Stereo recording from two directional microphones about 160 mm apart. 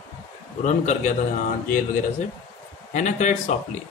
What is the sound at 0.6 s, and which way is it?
Speech, 50° left (ahead or behind).